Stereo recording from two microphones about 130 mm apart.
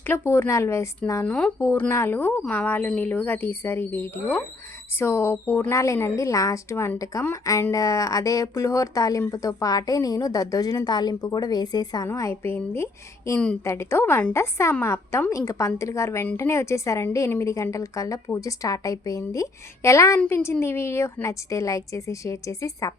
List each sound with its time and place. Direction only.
0.0 s a woman's voice: 20° left (ahead or behind)
1.3 s a woman's voice: 10° left (ahead or behind); by 23.0 s 25° left (ahead or behind)